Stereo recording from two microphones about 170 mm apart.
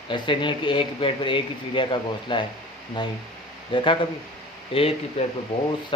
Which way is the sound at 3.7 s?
30° left (ahead or behind).